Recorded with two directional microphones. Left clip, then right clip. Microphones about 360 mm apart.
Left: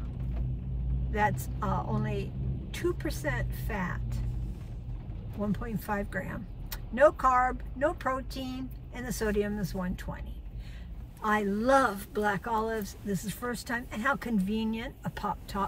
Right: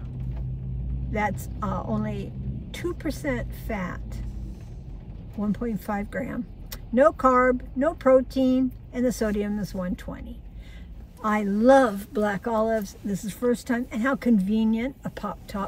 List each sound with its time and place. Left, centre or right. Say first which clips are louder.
1.1 s speech: right 1 dB; centre
5.5 s speech: right 6 dB; centre
11.2 s speech: right 7 dB; centre